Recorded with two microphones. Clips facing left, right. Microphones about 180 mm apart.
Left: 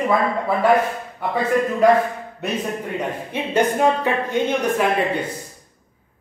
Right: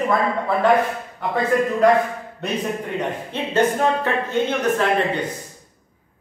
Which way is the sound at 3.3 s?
15° left (ahead or behind).